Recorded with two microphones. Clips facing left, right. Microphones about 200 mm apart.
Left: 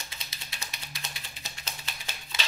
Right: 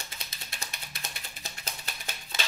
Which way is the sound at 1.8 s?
45° right (ahead or behind).